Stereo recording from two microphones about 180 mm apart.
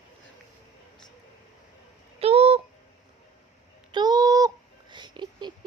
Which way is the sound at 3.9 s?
25° right (ahead or behind).